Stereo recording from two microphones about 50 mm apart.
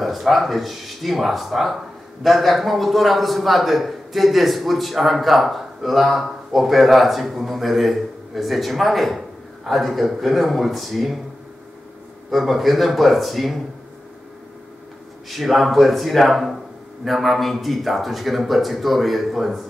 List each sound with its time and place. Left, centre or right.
0.0 s a man's voice: centre
12.3 s a man's voice: centre
15.2 s a man's voice: centre